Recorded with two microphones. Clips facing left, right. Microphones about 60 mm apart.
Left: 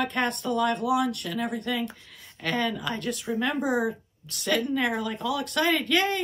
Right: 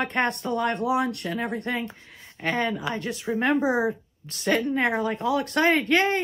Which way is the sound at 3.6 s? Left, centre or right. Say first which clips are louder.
Right 2 dB; right.